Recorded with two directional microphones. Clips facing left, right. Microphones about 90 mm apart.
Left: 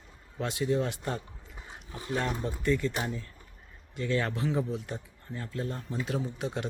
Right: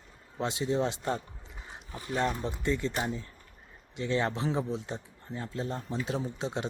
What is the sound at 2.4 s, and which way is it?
Speech, 20° right (ahead or behind).